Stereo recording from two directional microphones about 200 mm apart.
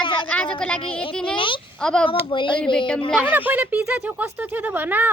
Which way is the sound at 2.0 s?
25° left (ahead or behind).